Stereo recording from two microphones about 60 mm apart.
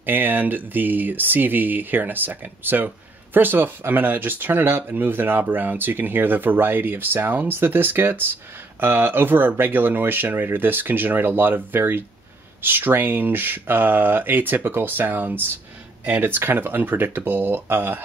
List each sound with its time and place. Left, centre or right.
0.0 s speech: right